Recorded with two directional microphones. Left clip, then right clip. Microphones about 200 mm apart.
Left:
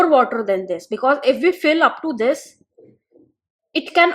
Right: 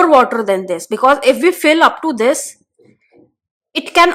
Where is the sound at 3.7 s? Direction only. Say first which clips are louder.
Right 4 dB; 40° right (ahead or behind).